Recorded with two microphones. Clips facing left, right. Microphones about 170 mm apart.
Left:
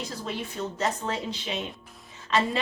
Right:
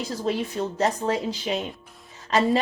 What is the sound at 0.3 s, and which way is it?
Speech, 35° right (ahead or behind).